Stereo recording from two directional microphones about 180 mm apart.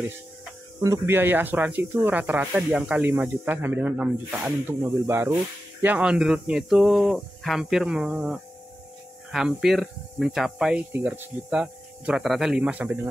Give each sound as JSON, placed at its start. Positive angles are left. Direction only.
{"t": 0.8, "sound": "speech", "side_deg": -15}
{"t": 10.9, "sound": "speech", "side_deg": -10}